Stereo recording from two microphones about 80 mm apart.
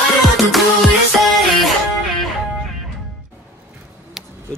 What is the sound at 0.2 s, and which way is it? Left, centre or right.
Music, centre.